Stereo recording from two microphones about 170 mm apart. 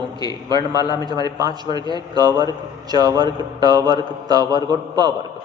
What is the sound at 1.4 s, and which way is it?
A woman's voice, 25° right (ahead or behind).